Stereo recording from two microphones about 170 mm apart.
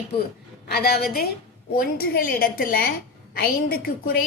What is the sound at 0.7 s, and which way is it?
A woman's voice, 65° left (ahead or behind).